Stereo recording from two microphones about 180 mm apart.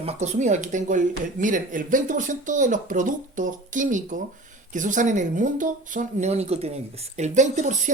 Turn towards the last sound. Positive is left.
turn(degrees=-40)  # may be behind; listen again after turning